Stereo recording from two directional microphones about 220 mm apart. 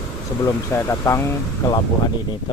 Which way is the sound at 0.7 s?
10° left (ahead or behind).